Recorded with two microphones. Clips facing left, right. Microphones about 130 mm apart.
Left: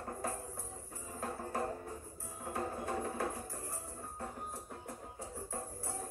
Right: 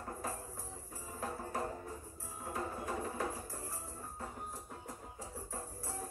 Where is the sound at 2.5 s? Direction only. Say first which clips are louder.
Left 2 dB; 60° left (ahead or behind).